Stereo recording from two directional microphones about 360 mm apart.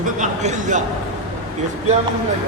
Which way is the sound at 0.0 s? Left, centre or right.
Centre.